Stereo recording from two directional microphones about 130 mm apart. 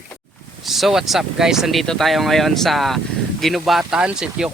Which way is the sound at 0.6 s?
Centre (ahead or behind).